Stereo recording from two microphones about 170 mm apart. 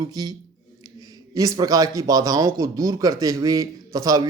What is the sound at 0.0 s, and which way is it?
Speech, 25° right (ahead or behind).